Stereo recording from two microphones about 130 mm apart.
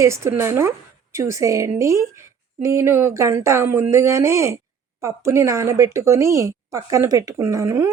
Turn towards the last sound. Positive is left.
turn(degrees=-20)  # may be behind; listen again after turning